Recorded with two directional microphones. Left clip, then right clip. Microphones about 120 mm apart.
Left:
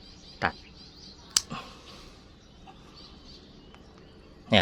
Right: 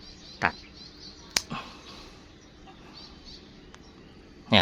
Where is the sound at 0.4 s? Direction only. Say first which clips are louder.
Right 2 dB; centre (ahead or behind).